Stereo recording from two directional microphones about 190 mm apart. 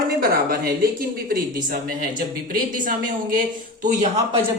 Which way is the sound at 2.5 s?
45° right (ahead or behind).